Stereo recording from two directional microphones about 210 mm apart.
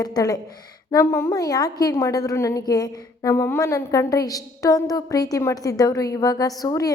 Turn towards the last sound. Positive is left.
turn(degrees=15)  # may be behind; listen again after turning